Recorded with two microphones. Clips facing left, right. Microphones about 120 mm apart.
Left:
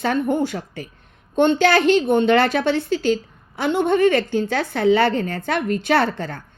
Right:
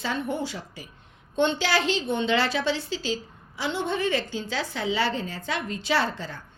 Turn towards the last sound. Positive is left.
turn(degrees=60)  # may be behind; listen again after turning